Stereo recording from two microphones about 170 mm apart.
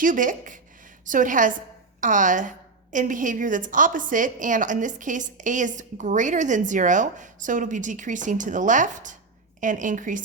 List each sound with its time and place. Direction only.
0.0 s a woman's voice: 50° right (ahead or behind)